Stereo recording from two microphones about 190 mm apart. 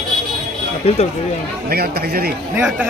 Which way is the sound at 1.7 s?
55° right (ahead or behind).